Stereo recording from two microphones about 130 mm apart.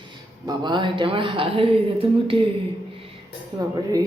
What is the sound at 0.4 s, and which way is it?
A woman's voice, 35° right (ahead or behind).